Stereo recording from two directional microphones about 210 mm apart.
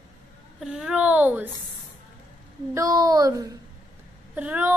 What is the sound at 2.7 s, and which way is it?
A child's voice, 15° right (ahead or behind).